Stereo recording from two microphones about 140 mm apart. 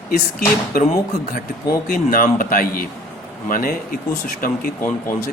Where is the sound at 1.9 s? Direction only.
85° left.